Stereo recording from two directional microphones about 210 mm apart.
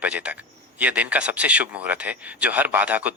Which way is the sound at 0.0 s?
5° right (ahead or behind).